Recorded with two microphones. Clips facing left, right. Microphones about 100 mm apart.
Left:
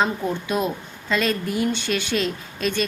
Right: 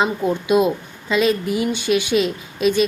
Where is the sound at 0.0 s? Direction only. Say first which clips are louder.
Right 3 dB; 15° right (ahead or behind).